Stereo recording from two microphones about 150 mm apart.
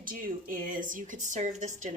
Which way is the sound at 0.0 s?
65° right (ahead or behind).